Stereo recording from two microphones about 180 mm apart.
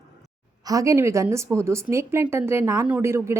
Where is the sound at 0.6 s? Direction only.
20° right (ahead or behind).